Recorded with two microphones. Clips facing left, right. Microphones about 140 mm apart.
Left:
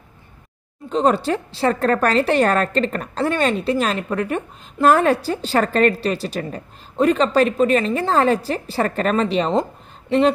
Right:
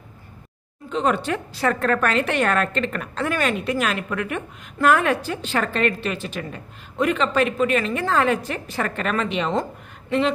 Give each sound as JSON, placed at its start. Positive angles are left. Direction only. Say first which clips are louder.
{"t": 0.8, "sound": "a woman's voice", "louder": "left 4 dB", "side_deg": 35}